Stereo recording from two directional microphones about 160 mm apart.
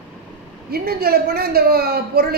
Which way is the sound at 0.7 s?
75° right (ahead or behind).